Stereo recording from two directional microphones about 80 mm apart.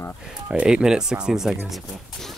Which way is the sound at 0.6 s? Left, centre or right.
Centre.